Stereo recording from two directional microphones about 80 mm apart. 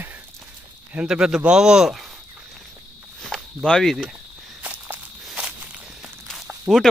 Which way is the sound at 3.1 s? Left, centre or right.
Centre.